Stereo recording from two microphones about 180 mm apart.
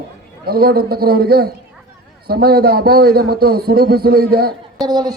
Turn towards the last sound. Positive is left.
turn(degrees=-20)  # may be behind; listen again after turning